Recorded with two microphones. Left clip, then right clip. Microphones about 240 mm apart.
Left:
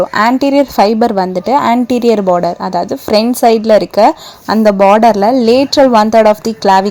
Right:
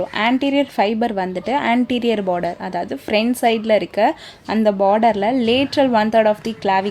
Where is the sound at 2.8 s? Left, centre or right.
Centre.